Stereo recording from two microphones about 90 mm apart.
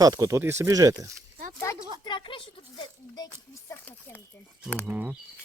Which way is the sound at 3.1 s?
45° left (ahead or behind).